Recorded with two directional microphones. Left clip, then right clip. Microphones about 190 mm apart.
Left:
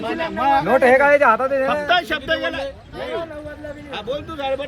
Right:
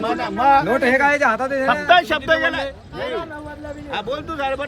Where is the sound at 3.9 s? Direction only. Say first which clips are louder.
Right 2 dB; 5° right (ahead or behind).